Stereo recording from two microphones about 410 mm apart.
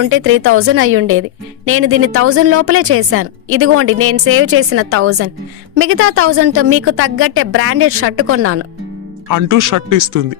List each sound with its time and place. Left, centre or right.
0.0 s a woman's voice: right
9.3 s speech: right